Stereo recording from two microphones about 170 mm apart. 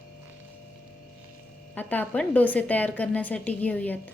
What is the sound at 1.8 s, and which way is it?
A woman's voice, 10° left (ahead or behind).